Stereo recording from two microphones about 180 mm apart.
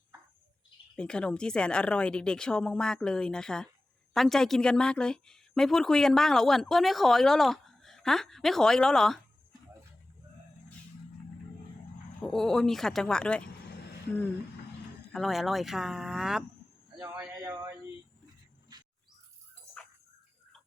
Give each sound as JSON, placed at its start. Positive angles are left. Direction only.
{"t": 0.9, "sound": "a woman's voice", "side_deg": 5}
{"t": 12.2, "sound": "a woman's voice", "side_deg": 0}
{"t": 15.1, "sound": "a woman's voice", "side_deg": 0}
{"t": 17.0, "sound": "a sound", "side_deg": -10}
{"t": 18.7, "sound": "cricket", "side_deg": -25}